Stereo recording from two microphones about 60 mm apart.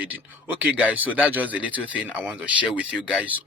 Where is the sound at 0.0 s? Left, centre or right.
Right.